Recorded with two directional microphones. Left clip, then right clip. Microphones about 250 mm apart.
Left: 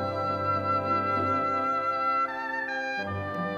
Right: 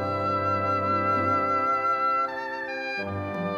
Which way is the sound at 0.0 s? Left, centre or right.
Right.